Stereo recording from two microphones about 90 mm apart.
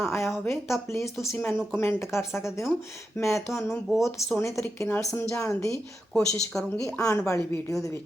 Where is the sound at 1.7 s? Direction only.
30° left (ahead or behind).